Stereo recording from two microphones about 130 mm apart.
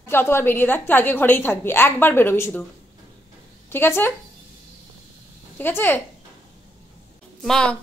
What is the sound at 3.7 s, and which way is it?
Speech, 15° left (ahead or behind).